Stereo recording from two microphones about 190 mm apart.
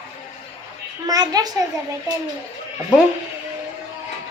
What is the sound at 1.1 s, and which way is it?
Speech, 20° right (ahead or behind).